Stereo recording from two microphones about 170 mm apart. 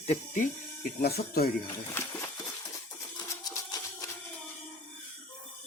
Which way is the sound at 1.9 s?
15° left (ahead or behind).